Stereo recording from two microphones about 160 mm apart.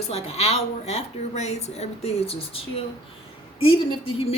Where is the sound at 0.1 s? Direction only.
40° left (ahead or behind).